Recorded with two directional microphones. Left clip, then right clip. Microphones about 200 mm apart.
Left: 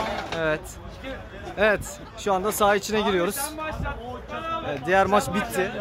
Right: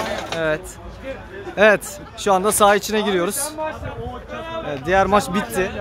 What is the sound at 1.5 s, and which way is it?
Speech, 30° right (ahead or behind).